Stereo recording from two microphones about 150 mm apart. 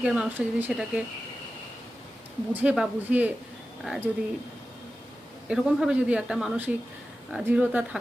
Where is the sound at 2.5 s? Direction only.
10° right (ahead or behind).